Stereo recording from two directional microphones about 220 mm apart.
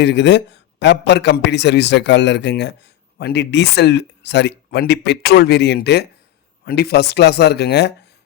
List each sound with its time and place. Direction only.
0.0 s a man's voice: 55° left (ahead or behind)